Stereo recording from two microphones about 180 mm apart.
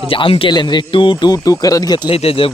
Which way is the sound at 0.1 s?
30° left (ahead or behind).